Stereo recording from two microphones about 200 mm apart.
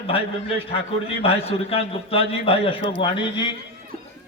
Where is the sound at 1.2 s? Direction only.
30° left (ahead or behind).